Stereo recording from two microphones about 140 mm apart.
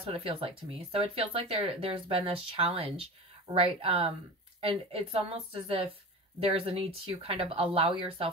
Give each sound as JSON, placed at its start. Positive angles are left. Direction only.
{"t": 0.0, "sound": "speech", "side_deg": -40}